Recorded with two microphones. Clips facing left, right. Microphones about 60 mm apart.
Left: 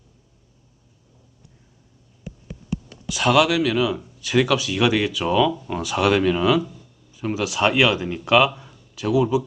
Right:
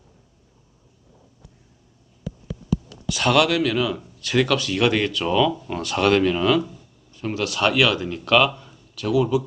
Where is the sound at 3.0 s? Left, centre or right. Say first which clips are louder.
Left 1 dB; centre.